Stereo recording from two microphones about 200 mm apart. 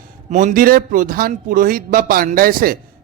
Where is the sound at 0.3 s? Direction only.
40° right (ahead or behind).